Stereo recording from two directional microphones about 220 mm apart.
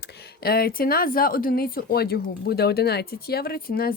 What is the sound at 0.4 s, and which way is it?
Speech, 45° left (ahead or behind).